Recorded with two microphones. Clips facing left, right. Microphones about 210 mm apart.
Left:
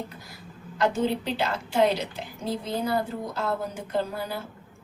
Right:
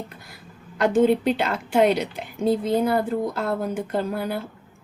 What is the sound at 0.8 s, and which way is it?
A woman's voice, 55° right (ahead or behind).